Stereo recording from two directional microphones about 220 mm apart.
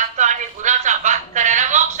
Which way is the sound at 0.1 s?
35° right (ahead or behind).